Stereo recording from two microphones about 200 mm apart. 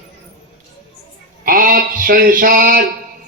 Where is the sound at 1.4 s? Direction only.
45° right (ahead or behind).